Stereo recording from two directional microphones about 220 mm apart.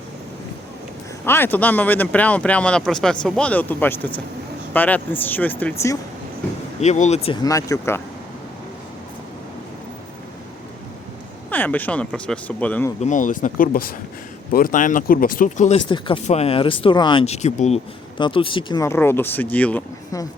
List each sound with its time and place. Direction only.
1.2 s speech: 10° left (ahead or behind)
6.7 s speech: 30° left (ahead or behind)
7.4 s speech: 15° left (ahead or behind)
11.5 s speech: 10° left (ahead or behind)
13.0 s speech: 35° left (ahead or behind); by 20.2 s 5° left (ahead or behind)